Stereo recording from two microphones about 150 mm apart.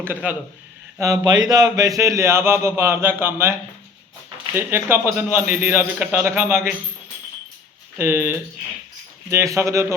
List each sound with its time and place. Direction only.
0.0 s speech: 10° right (ahead or behind)
0.9 s speech: 20° right (ahead or behind)
4.5 s speech: 15° right (ahead or behind)
7.9 s speech: 15° right (ahead or behind)